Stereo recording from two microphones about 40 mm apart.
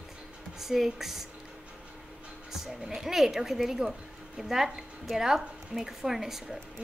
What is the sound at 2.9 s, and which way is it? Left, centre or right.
Speech, centre.